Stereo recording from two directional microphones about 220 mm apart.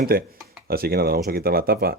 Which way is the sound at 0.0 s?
40° right (ahead or behind).